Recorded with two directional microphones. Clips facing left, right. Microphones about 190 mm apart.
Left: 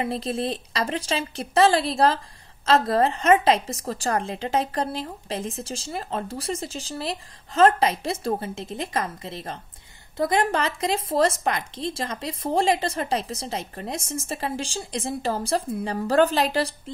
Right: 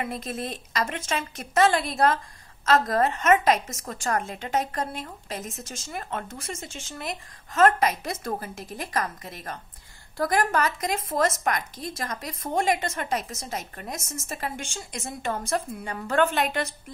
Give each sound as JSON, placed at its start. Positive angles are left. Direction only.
{"t": 0.0, "sound": "a woman's voice", "side_deg": 30}